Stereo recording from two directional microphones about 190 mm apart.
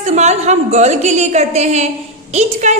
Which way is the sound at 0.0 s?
35° right (ahead or behind).